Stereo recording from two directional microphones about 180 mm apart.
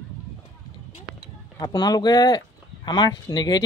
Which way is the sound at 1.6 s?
20° left (ahead or behind).